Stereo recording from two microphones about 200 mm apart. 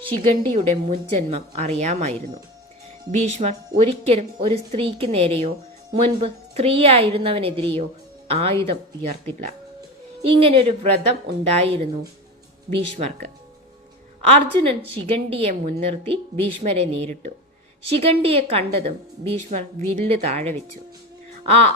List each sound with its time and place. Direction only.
0.2 s a woman's voice: 30° right (ahead or behind)
20.1 s a woman's voice: 30° right (ahead or behind)